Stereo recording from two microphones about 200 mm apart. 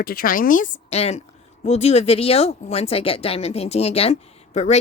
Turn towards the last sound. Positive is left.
turn(degrees=35)  # may be behind; listen again after turning